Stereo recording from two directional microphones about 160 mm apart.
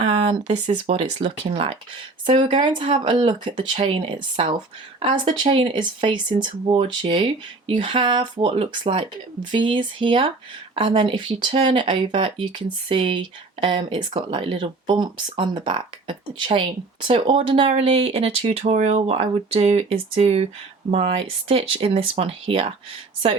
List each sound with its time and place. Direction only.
0.0 s speech: 40° right (ahead or behind)